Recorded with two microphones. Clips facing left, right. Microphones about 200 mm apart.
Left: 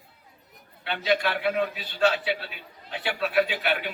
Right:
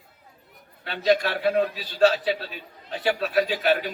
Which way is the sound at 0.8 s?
40° right (ahead or behind).